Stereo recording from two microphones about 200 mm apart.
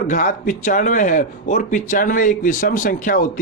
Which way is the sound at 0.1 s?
40° left (ahead or behind).